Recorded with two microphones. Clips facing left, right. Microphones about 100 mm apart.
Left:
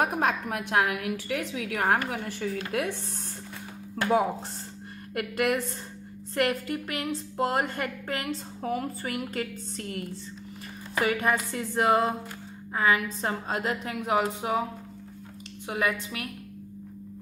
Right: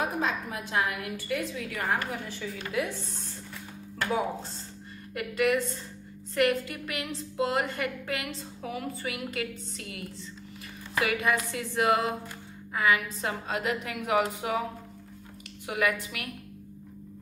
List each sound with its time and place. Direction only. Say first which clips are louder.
0.0 s a woman's voice: left 4 dB; 60° left (ahead or behind)
5.1 s a woman's voice: even; 50° left (ahead or behind); by 14.6 s 30° left (ahead or behind)
15.7 s a woman's voice: even; 30° left (ahead or behind)